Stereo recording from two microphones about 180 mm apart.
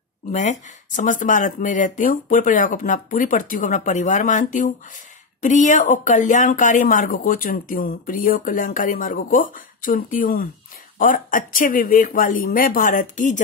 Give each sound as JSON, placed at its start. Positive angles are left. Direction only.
{"t": 0.3, "sound": "a woman's voice", "side_deg": 45}